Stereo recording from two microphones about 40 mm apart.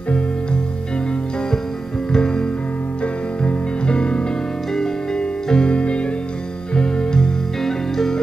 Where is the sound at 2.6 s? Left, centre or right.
Left; by 7.5 s centre.